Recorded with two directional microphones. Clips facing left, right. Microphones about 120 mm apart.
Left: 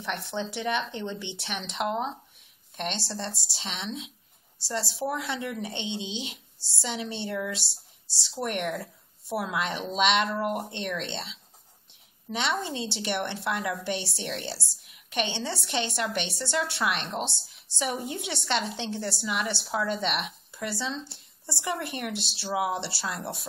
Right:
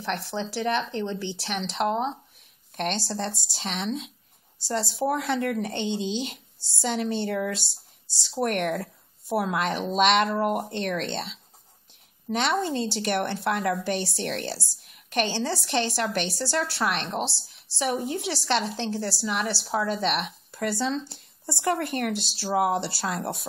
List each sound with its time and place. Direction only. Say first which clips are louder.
0.1 s speech: right 2 dB; centre (ahead or behind)
5.4 s a woman's voice: right 6 dB; 55° right (ahead or behind)
5.7 s speech: right 6 dB; centre (ahead or behind)
12.4 s speech: right 4 dB; centre (ahead or behind)